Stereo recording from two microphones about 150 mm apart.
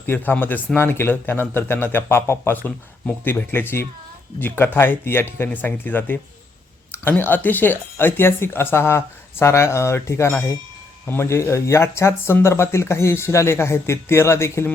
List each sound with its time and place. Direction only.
0.0 s speech: 15° left (ahead or behind)